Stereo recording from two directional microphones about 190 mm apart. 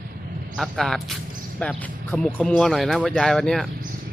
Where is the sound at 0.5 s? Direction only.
Centre (ahead or behind).